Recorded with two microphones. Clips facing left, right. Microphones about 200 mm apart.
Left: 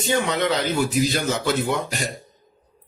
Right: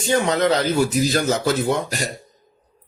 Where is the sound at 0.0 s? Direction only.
40° right (ahead or behind).